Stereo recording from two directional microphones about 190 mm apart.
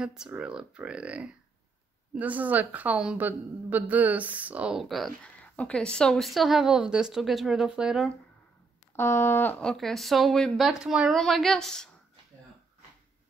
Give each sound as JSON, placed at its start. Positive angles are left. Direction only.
{"t": 0.0, "sound": "a woman's voice", "side_deg": -5}
{"t": 8.9, "sound": "a woman's voice", "side_deg": 15}